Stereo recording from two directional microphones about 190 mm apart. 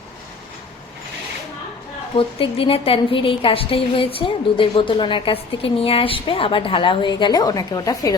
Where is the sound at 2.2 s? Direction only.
30° left (ahead or behind).